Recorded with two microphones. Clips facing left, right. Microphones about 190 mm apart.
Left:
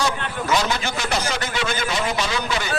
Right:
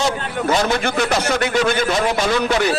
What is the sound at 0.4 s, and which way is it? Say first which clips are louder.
A man's voice: right 4 dB; 55° right (ahead or behind).